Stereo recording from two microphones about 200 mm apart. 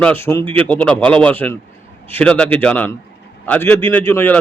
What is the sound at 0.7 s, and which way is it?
A man's voice, 5° left (ahead or behind).